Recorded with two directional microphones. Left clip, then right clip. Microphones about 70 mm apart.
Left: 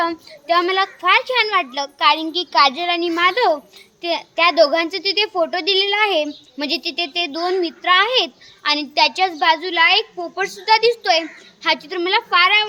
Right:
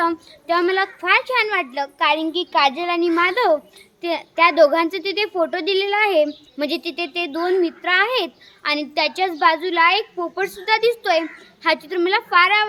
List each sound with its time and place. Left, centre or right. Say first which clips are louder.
0.0 s a child's voice: even; right